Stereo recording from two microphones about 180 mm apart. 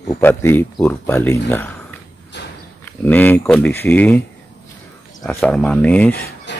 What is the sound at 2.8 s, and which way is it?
Speech, 10° left (ahead or behind).